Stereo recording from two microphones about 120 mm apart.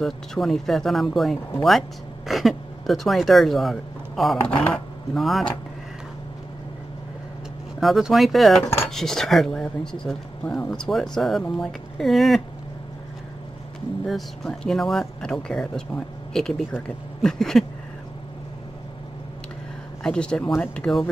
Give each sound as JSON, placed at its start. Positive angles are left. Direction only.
{"t": 0.0, "sound": "speech", "side_deg": 0}
{"t": 7.8, "sound": "speech", "side_deg": 0}
{"t": 14.0, "sound": "speech", "side_deg": 0}
{"t": 20.0, "sound": "speech", "side_deg": 5}